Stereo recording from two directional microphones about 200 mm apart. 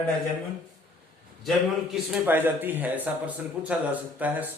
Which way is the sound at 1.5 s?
Centre (ahead or behind).